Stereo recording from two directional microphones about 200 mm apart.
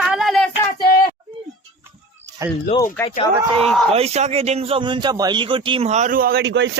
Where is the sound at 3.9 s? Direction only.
30° right (ahead or behind).